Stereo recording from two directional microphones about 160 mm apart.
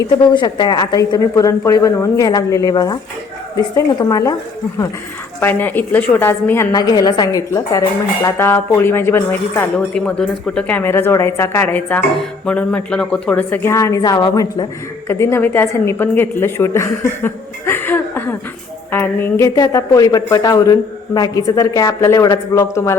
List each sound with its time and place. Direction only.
0.0 s a woman's voice: 25° left (ahead or behind)
5.4 s a woman's voice: 10° left (ahead or behind)